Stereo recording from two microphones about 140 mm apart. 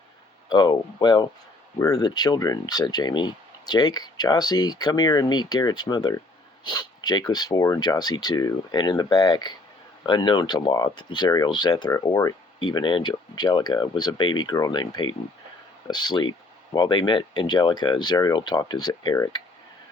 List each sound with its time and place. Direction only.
0.5 s speech: 30° left (ahead or behind)